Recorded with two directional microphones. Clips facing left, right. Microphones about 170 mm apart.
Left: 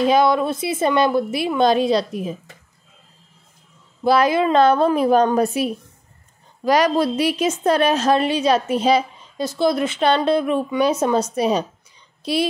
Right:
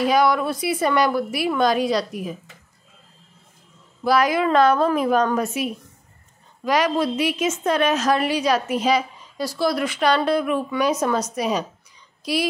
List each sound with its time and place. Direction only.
0.0 s a woman's voice: 25° left (ahead or behind)
4.0 s a woman's voice: 25° left (ahead or behind)